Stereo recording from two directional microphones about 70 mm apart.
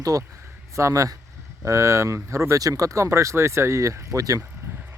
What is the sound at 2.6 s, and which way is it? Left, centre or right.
Speech, right.